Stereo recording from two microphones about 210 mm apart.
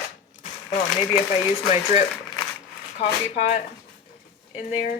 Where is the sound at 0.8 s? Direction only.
20° left (ahead or behind).